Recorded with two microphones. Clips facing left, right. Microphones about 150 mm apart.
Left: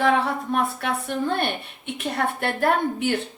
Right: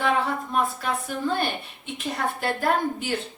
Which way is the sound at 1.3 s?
60° left (ahead or behind).